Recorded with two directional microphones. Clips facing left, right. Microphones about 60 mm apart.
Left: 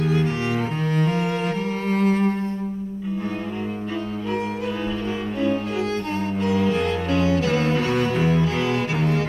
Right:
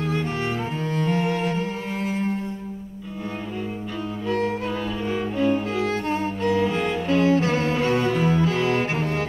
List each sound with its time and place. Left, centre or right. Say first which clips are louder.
1.0 s cello: even; left
6.6 s music: left 1 dB; right
7.2 s music: right 2 dB; right
7.9 s music: even; left
8.5 s cello: right 1 dB; right